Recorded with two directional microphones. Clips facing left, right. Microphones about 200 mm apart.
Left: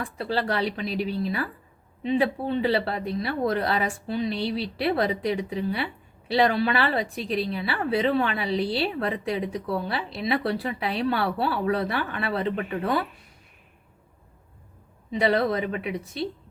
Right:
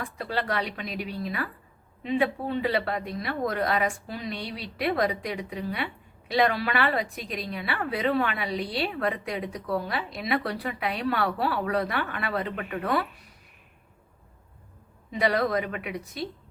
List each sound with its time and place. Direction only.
0.2 s a woman's voice: 30° left (ahead or behind)
15.2 s speech: 30° left (ahead or behind)